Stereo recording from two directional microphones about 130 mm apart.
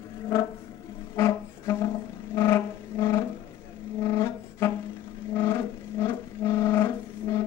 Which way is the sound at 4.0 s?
20° left (ahead or behind).